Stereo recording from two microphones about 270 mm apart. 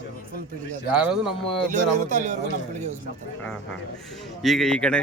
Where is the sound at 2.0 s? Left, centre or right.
Right.